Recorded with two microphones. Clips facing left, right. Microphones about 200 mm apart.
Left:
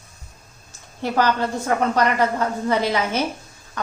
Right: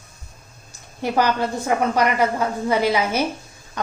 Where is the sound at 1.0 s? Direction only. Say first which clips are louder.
Even; 15° right (ahead or behind).